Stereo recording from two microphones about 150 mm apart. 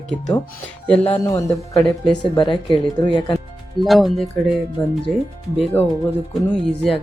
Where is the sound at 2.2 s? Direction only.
35° left (ahead or behind).